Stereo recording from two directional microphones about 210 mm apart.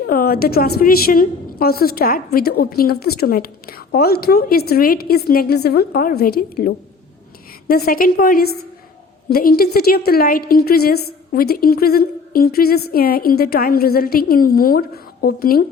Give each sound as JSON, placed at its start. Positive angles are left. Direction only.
{"t": 0.1, "sound": "a woman's voice", "side_deg": 45}